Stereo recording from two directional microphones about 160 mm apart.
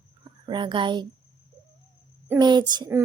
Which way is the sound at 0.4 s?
30° right (ahead or behind).